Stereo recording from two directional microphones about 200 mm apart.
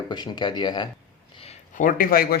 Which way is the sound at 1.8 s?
45° left (ahead or behind).